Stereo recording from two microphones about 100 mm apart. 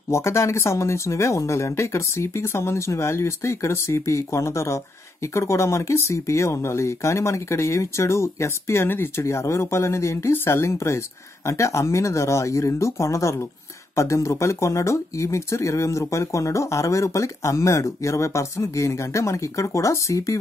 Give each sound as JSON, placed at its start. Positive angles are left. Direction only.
{"t": 0.1, "sound": "speech", "side_deg": 30}